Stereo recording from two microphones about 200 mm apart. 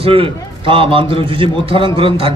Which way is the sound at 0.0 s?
25° right (ahead or behind).